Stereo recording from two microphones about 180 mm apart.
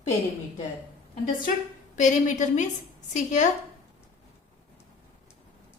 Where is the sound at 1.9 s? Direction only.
45° left (ahead or behind).